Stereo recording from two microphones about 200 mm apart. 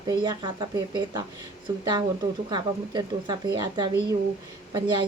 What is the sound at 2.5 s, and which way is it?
Speech, 20° right (ahead or behind).